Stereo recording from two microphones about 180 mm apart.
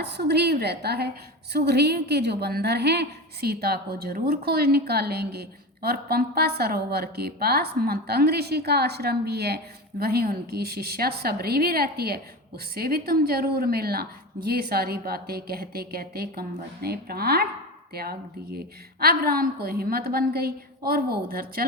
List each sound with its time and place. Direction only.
0.0 s a woman's voice: 70° right (ahead or behind)